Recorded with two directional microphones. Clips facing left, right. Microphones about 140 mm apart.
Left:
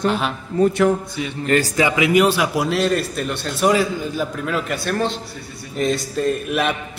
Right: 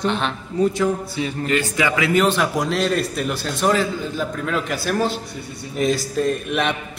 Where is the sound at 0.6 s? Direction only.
65° left (ahead or behind).